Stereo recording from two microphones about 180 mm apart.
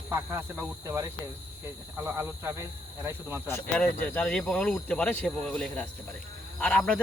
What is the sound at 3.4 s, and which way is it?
Speech, 10° left (ahead or behind).